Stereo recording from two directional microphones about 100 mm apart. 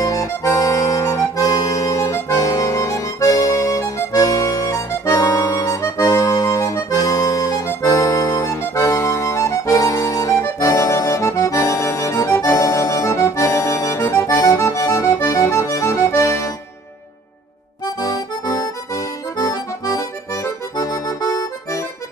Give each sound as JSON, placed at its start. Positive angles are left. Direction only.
{"t": 0.0, "sound": "accordion", "side_deg": 35}
{"t": 17.8, "sound": "accordion", "side_deg": 35}